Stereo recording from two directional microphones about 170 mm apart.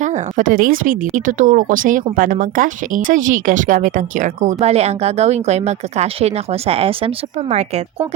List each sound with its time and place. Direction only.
0.0 s a woman's voice: 50° right (ahead or behind)